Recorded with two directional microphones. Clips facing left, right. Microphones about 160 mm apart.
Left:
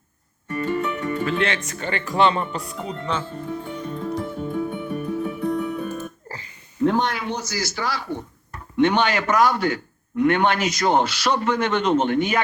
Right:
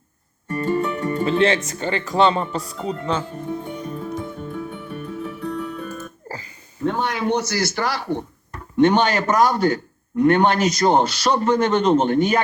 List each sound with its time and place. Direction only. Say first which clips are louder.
0.4 s speech: right 2 dB; 40° right (ahead or behind)
3.2 s music: right 2 dB; 15° right (ahead or behind)
4.5 s music: left 5 dB; 15° left (ahead or behind)
6.8 s a man's voice: left 3 dB; centre (ahead or behind)
7.3 s speech: right 6 dB; 65° right (ahead or behind)
8.8 s a man's voice: right 3 dB; 40° right (ahead or behind)